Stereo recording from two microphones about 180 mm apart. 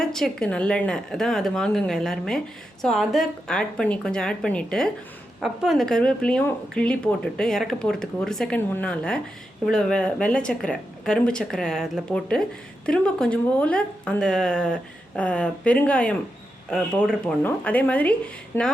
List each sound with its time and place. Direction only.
0.0 s speech: centre (ahead or behind)